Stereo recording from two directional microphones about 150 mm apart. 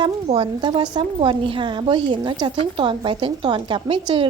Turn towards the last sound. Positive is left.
turn(degrees=-35)  # may be behind; listen again after turning